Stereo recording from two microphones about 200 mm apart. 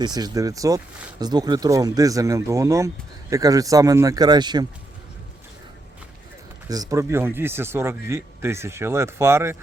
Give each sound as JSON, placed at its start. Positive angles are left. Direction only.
{"t": 0.0, "sound": "speech", "side_deg": -20}
{"t": 6.7, "sound": "speech", "side_deg": -15}